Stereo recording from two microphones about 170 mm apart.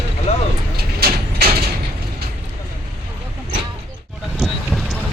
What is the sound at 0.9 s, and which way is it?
Vehicle, 65° right (ahead or behind).